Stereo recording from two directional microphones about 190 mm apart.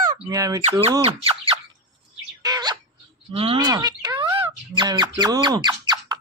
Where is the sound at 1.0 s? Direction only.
30° right (ahead or behind).